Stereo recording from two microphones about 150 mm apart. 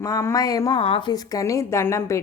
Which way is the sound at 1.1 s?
25° left (ahead or behind).